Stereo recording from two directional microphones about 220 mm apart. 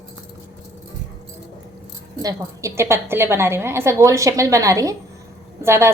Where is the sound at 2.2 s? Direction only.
15° right (ahead or behind).